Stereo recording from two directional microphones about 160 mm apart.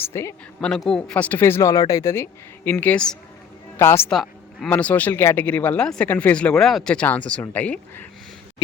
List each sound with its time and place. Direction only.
0.0 s speech: 15° left (ahead or behind)
0.9 s speech: 5° left (ahead or behind)
4.1 s speech: centre (ahead or behind)